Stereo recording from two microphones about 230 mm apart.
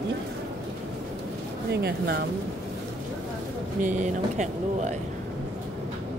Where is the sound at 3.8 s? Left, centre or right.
Right.